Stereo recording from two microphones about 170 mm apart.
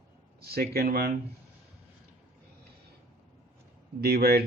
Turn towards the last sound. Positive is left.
turn(degrees=-65)  # may be behind; listen again after turning